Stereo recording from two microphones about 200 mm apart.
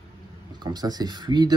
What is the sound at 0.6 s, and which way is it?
Speech, 20° right (ahead or behind).